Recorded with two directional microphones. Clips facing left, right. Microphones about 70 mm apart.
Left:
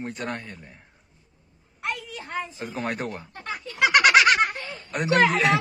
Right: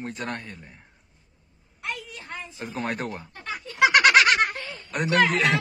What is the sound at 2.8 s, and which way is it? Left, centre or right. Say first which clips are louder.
Speech: even; centre.